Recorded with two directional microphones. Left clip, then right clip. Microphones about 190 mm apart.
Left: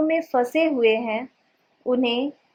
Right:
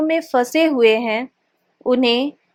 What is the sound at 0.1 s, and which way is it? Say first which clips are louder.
A woman's voice: right 4 dB; 20° right (ahead or behind).